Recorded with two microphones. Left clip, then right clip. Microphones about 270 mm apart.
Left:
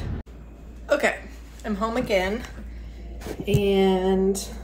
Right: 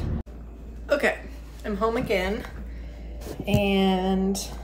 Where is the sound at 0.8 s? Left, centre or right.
Centre.